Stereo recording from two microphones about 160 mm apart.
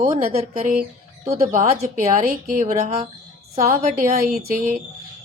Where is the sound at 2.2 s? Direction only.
50° right (ahead or behind).